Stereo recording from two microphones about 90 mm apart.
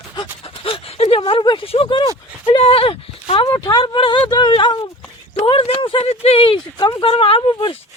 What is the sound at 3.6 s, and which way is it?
Speech, 50° left (ahead or behind).